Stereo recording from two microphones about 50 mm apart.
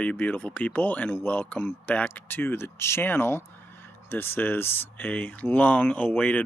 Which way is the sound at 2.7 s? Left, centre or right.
Left.